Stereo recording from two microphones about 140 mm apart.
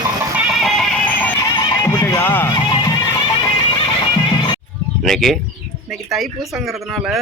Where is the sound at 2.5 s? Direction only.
30° left (ahead or behind).